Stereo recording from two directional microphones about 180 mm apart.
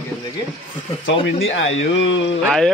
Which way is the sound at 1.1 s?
90° left.